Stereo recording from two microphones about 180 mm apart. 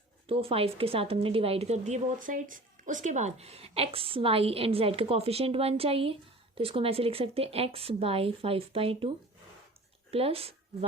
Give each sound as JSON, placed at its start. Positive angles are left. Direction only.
{"t": 0.3, "sound": "a woman's voice", "side_deg": -30}